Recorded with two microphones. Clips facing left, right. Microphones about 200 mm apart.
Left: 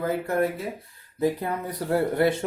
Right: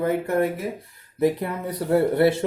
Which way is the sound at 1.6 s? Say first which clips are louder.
Right 5 dB; 25° right (ahead or behind).